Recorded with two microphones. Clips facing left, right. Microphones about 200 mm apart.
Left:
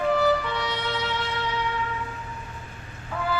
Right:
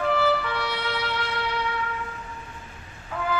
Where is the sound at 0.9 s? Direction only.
10° right (ahead or behind).